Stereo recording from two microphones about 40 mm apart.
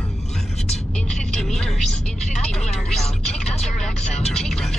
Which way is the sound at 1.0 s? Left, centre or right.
Centre.